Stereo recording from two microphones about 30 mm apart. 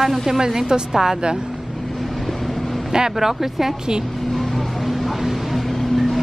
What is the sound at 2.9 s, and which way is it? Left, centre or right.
Speech, centre.